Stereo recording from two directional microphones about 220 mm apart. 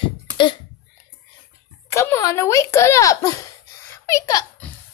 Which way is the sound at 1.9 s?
10° left (ahead or behind).